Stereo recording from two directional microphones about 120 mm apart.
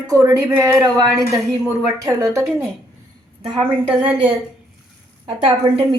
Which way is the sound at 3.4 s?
40° right (ahead or behind).